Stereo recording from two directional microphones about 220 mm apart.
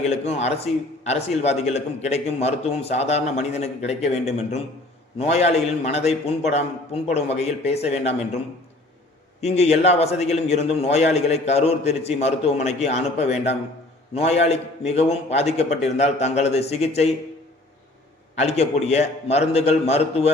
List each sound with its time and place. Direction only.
0.0 s a man's voice: 30° left (ahead or behind)
9.4 s a man's voice: 30° left (ahead or behind)
18.3 s a man's voice: 30° left (ahead or behind)